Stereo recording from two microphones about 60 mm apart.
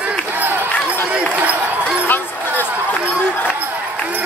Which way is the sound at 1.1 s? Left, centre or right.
Centre.